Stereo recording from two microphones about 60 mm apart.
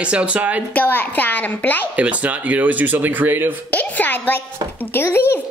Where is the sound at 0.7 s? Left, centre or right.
Left.